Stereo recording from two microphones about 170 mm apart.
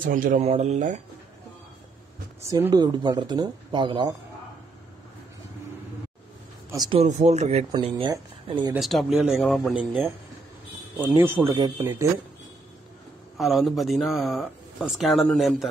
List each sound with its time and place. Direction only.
0.0 s speech: 50° right (ahead or behind)
2.4 s speech: 20° right (ahead or behind)
6.9 s speech: 40° right (ahead or behind)
7.7 s speech: 25° right (ahead or behind)
8.7 s speech: centre (ahead or behind); by 11.9 s 20° right (ahead or behind)
13.4 s speech: centre (ahead or behind)